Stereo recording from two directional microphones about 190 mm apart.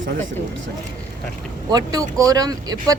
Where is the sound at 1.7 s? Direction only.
20° right (ahead or behind).